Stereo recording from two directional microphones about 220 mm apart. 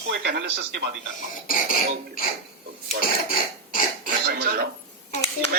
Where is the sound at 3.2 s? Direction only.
40° left (ahead or behind).